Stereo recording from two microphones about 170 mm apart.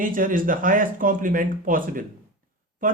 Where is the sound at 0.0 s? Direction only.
55° right (ahead or behind).